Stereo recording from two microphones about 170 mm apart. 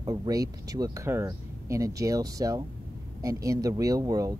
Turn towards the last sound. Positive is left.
turn(degrees=-20)  # may be behind; listen again after turning